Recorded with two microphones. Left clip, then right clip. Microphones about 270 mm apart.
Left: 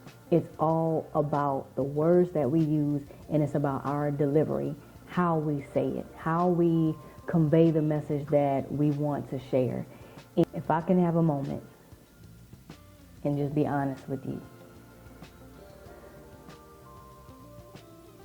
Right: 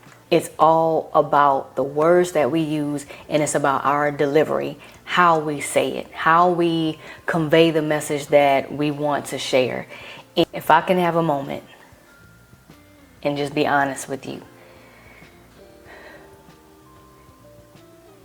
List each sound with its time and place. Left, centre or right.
0.7 s a woman's voice: right
13.2 s a woman's voice: centre